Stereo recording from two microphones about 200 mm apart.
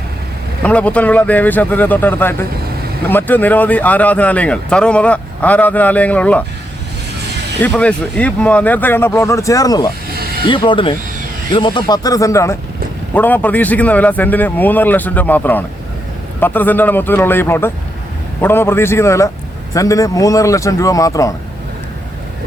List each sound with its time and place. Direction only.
0.6 s speech: 5° left (ahead or behind)
7.6 s speech: 5° left (ahead or behind)